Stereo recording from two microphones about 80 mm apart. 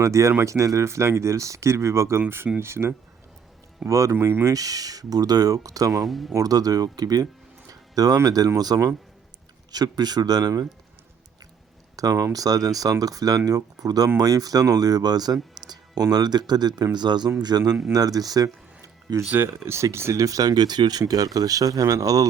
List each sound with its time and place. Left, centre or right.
0.0 s speech: right
6.0 s speech: centre
6.3 s speech: right
11.9 s speech: right
19.3 s speech: right
21.0 s speech: right